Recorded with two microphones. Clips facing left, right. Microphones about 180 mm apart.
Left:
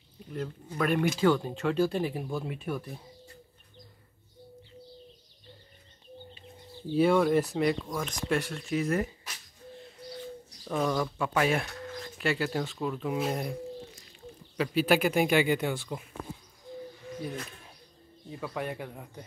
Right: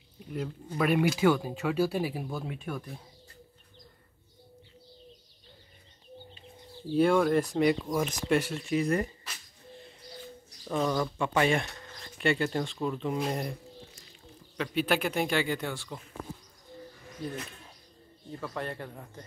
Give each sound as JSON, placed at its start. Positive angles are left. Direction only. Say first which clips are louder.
{"t": 0.3, "sound": "speech", "louder": "right 1 dB", "side_deg": -5}
{"t": 6.9, "sound": "speech", "louder": "even", "side_deg": 0}
{"t": 10.6, "sound": "speech", "louder": "even", "side_deg": 0}
{"t": 14.6, "sound": "speech", "louder": "left 3 dB", "side_deg": 5}
{"t": 18.3, "sound": "speech", "louder": "left 1 dB", "side_deg": 10}